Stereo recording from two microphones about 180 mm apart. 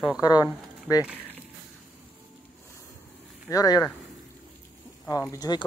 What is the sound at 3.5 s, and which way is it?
Speech, 20° left (ahead or behind).